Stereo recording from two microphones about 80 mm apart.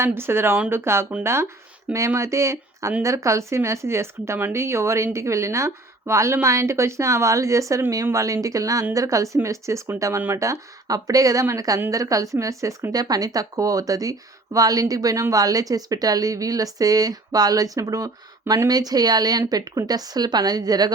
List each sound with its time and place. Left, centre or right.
0.0 s a woman's voice: right